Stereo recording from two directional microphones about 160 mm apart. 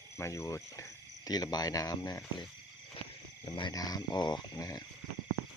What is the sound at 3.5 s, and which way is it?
Speech, 25° left (ahead or behind).